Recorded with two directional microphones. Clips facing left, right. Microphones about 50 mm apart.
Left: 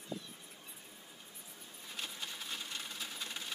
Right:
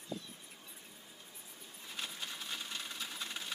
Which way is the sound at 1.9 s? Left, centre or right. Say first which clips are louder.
Right 1 dB; centre.